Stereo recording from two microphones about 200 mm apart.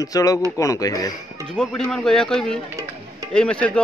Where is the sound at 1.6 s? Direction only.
5° left (ahead or behind).